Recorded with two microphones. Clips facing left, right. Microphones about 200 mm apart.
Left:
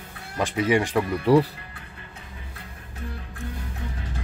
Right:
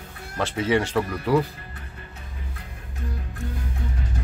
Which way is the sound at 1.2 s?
30° left (ahead or behind).